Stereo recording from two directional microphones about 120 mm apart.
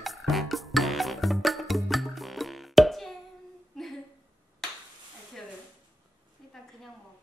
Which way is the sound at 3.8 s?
5° left (ahead or behind).